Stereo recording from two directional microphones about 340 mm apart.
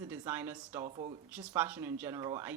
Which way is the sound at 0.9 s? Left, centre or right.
Centre.